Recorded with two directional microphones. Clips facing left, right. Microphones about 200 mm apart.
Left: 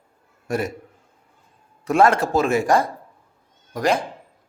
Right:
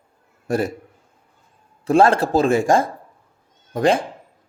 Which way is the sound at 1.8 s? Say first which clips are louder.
Right 2 dB; 30° right (ahead or behind).